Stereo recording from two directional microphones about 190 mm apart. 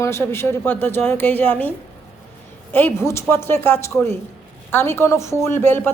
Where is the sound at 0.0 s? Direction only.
15° left (ahead or behind).